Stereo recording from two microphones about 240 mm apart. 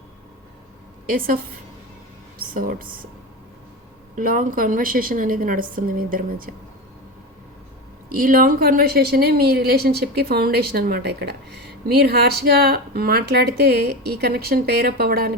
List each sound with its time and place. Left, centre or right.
1.0 s speech: right
2.5 s speech: right
4.1 s speech: right
8.1 s speech: right